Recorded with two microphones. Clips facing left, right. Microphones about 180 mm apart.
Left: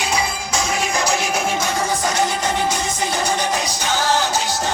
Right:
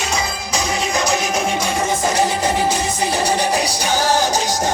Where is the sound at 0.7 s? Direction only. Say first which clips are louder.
Right 2 dB; 25° right (ahead or behind).